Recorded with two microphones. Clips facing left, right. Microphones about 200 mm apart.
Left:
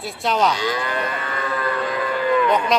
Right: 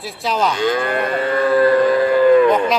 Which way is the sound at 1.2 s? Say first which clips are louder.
Right 12 dB; 35° right (ahead or behind).